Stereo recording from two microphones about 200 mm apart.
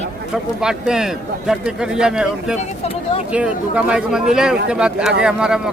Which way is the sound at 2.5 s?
30° left (ahead or behind).